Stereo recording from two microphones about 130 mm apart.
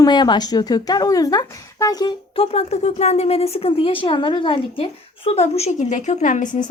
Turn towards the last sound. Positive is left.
turn(degrees=75)  # may be behind; listen again after turning